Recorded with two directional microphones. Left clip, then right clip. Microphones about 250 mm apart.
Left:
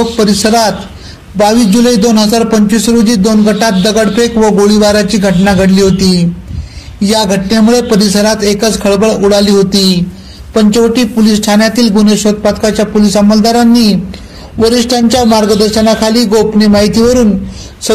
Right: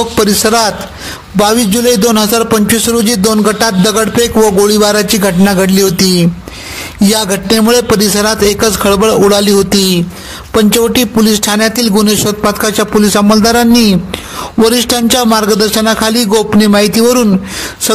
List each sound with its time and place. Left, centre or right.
0.2 s a man's voice: right
4.4 s a man's voice: right
4.6 s a man's voice: right
15.0 s a man's voice: right